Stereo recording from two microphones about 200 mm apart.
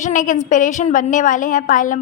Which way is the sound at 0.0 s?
40° left (ahead or behind).